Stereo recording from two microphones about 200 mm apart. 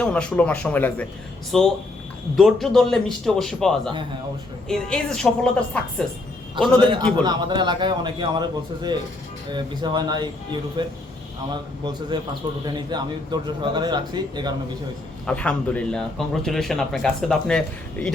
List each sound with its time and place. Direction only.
0.0 s speech: 5° left (ahead or behind)
7.3 s a man's voice: 20° right (ahead or behind)
11.9 s a man's voice: 20° right (ahead or behind)
15.3 s speech: 5° left (ahead or behind)